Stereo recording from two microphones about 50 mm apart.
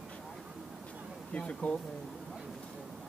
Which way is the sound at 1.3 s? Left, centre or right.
Left.